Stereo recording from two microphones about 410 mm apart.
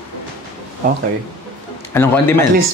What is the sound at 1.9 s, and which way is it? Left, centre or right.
Speech, centre.